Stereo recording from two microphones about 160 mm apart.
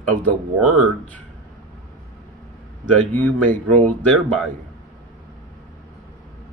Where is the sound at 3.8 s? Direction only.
10° left (ahead or behind).